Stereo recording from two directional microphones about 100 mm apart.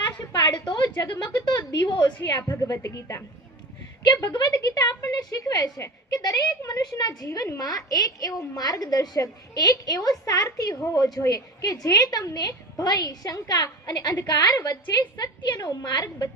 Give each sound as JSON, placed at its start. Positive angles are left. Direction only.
{"t": 0.6, "sound": "a woman's voice", "side_deg": 55}
{"t": 2.2, "sound": "a woman's voice", "side_deg": 25}
{"t": 4.2, "sound": "a woman's voice", "side_deg": 40}